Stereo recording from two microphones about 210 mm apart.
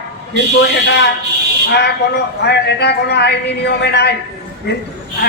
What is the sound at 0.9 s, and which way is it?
Speech, 55° left (ahead or behind).